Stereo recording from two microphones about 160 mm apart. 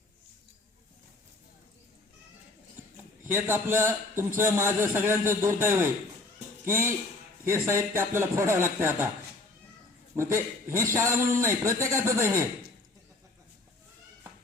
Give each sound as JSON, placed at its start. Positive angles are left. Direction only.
{"t": 3.2, "sound": "a man's voice", "side_deg": -15}
{"t": 10.2, "sound": "a man's voice", "side_deg": -15}